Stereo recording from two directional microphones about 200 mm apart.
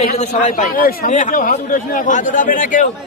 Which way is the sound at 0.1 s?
35° left (ahead or behind).